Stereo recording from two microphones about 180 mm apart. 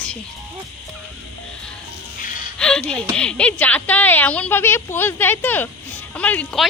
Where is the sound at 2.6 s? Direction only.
5° left (ahead or behind).